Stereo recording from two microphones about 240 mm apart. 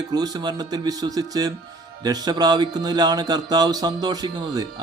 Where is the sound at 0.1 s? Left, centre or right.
Centre.